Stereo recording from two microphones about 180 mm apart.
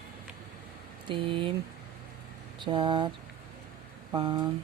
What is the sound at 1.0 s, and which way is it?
Speech, 30° right (ahead or behind).